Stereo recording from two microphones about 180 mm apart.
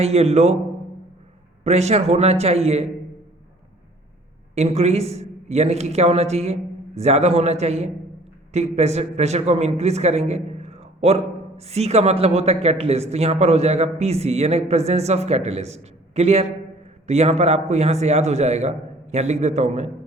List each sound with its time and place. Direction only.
0.0 s a man's voice: 35° right (ahead or behind)
1.6 s a man's voice: 35° right (ahead or behind)
4.5 s a man's voice: 35° right (ahead or behind)